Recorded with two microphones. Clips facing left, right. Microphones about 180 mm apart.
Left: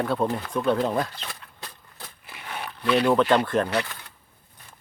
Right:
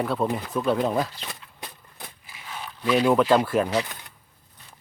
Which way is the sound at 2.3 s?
60° left (ahead or behind).